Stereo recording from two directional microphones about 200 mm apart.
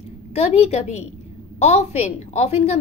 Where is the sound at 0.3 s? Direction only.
30° left (ahead or behind).